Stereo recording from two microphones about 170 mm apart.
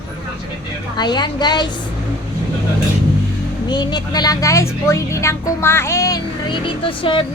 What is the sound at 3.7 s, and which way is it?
Speech, 25° left (ahead or behind).